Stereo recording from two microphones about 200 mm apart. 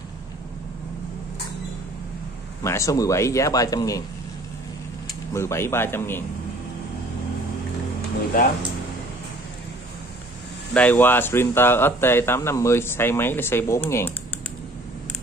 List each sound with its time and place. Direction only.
2.6 s speech: 15° left (ahead or behind)
5.3 s speech: 15° left (ahead or behind)
10.7 s speech: 5° left (ahead or behind)